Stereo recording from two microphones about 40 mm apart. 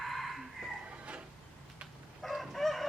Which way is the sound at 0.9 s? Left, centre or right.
Right.